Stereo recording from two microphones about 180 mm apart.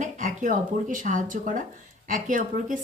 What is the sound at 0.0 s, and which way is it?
Speech, 45° right (ahead or behind).